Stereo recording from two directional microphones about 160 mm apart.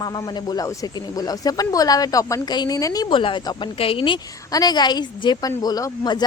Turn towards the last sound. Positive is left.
turn(degrees=25)  # may be behind; listen again after turning